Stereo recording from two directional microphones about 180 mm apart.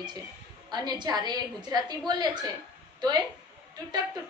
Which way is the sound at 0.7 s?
25° right (ahead or behind).